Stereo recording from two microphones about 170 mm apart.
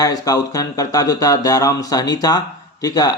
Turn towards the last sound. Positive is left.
turn(degrees=25)  # may be behind; listen again after turning